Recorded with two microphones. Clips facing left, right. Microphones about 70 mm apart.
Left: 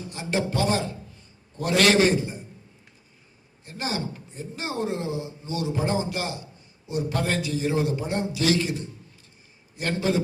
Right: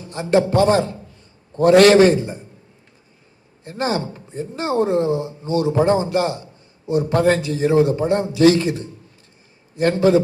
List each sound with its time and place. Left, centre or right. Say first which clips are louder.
0.0 s a man's voice: right 10 dB; right
3.7 s a man's voice: right 8 dB; right